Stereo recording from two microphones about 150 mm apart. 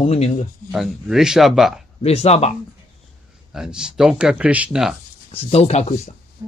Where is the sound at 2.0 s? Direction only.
45° left (ahead or behind).